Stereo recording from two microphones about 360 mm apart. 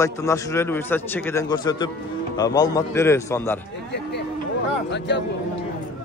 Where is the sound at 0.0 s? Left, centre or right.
Centre.